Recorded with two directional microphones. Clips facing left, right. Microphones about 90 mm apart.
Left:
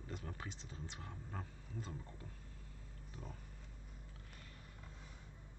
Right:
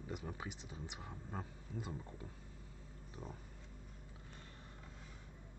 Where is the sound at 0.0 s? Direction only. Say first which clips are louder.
Right 3 dB; 15° right (ahead or behind).